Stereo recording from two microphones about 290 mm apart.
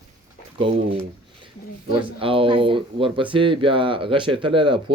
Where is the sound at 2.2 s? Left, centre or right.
Centre.